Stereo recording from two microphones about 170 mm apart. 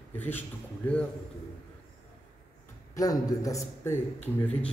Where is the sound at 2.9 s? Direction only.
20° left (ahead or behind).